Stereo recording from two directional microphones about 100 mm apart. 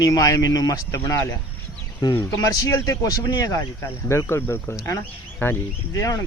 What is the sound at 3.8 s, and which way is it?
Speech, 25° left (ahead or behind).